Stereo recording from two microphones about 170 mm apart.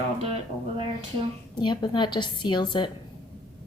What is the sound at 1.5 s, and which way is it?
A woman's voice, 25° left (ahead or behind).